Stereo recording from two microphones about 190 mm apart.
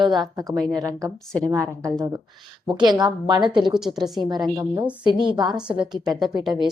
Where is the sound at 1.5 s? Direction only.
15° right (ahead or behind).